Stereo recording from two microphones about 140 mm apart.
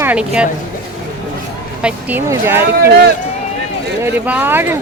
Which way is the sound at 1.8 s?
15° right (ahead or behind).